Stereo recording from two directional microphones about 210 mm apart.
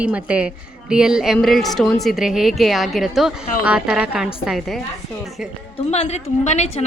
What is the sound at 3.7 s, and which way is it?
A woman's voice, 5° right (ahead or behind).